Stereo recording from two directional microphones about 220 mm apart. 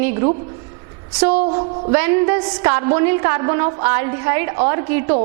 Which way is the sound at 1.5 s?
25° right (ahead or behind).